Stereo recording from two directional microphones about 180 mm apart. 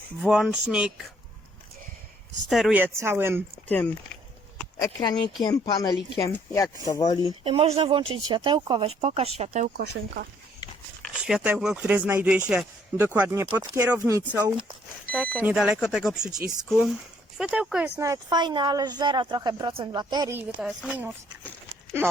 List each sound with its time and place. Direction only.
0.2 s speech: centre (ahead or behind)
2.5 s speech: centre (ahead or behind)
3.7 s speech: 10° left (ahead or behind)
7.4 s speech: 30° right (ahead or behind)
9.7 s speech: 65° right (ahead or behind)
11.1 s speech: 5° right (ahead or behind)
15.1 s speech: 5° left (ahead or behind)
15.4 s speech: 5° right (ahead or behind)
18.0 s speech: 20° right (ahead or behind)
20.3 s speech: 5° right (ahead or behind)